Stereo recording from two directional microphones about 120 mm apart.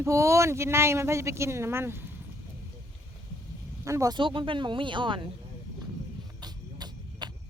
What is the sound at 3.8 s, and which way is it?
Speech, 25° right (ahead or behind).